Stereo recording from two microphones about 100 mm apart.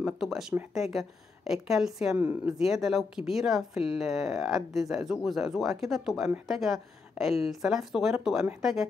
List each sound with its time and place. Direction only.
0.0 s speech: 5° right (ahead or behind)
2.1 s speech: 15° right (ahead or behind)
2.6 s speech: centre (ahead or behind)